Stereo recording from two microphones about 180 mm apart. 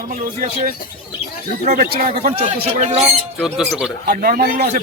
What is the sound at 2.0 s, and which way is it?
Speech, 55° right (ahead or behind).